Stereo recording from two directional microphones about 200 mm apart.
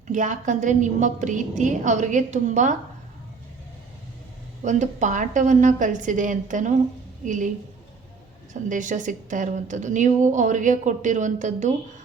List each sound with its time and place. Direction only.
0.1 s a woman's voice: 40° right (ahead or behind)
4.6 s a woman's voice: 35° right (ahead or behind)
8.7 s a woman's voice: 40° right (ahead or behind)